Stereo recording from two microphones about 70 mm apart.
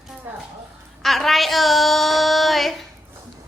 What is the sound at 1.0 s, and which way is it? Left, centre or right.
Child singing, centre.